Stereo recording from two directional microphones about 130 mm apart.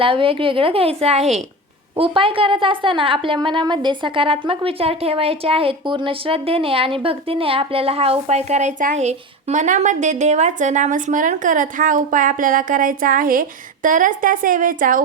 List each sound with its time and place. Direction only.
0.0 s a woman's voice: 45° right (ahead or behind)
2.0 s a woman's voice: 45° right (ahead or behind); by 15.0 s 90° right